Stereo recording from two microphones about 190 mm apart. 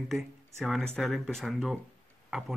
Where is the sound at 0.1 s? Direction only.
Centre (ahead or behind).